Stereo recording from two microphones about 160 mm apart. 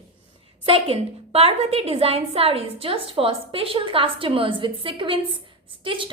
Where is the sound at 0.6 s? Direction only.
35° right (ahead or behind).